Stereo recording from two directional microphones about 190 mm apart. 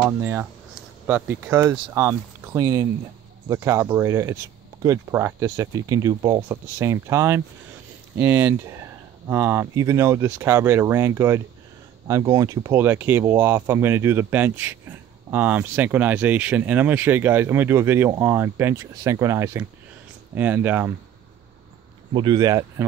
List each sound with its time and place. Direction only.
0.0 s speech: 10° right (ahead or behind)
22.1 s speech: 25° right (ahead or behind)